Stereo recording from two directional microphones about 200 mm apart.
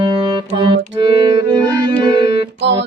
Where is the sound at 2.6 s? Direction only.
60° right (ahead or behind).